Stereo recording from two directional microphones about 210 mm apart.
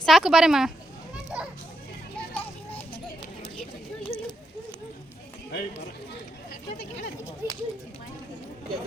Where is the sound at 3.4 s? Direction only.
25° left (ahead or behind).